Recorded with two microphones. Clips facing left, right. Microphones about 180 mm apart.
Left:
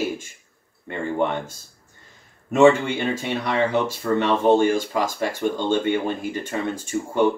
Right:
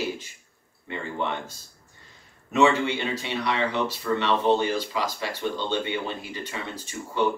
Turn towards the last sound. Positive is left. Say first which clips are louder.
# left 6 dB
turn(degrees=50)  # may be behind; listen again after turning